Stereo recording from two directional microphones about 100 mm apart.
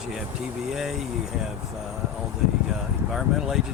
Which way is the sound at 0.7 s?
5° right (ahead or behind).